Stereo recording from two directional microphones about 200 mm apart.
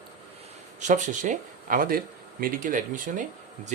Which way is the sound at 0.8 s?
40° right (ahead or behind).